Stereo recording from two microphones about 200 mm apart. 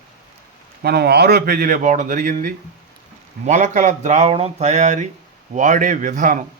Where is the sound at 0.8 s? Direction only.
50° right (ahead or behind).